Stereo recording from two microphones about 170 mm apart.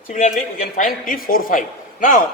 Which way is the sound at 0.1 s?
50° left (ahead or behind).